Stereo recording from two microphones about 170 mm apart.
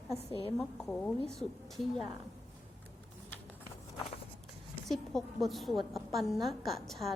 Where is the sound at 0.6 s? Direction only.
5° left (ahead or behind).